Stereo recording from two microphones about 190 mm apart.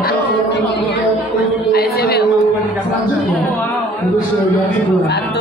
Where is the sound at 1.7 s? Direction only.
55° left (ahead or behind).